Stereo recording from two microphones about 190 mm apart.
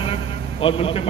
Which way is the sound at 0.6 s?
30° left (ahead or behind).